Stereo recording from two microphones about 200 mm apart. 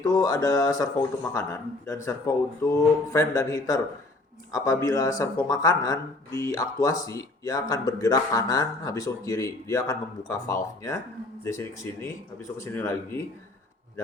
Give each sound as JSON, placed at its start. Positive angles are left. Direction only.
{"t": 0.1, "sound": "speech", "side_deg": 20}